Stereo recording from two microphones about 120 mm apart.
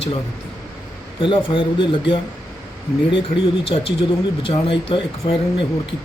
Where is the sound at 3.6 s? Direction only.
50° left (ahead or behind).